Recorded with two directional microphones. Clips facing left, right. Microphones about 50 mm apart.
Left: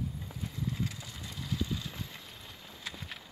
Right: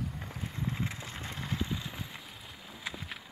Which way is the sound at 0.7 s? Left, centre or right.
Right.